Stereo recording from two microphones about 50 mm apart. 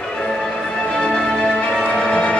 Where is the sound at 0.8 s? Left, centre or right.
Centre.